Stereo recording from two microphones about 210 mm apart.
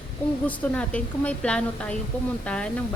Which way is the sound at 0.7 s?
5° left (ahead or behind).